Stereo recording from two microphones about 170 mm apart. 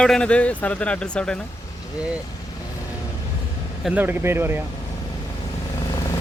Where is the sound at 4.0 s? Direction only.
10° right (ahead or behind).